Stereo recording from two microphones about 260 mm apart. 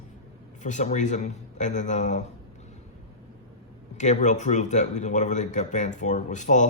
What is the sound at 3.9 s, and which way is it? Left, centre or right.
Speech, left.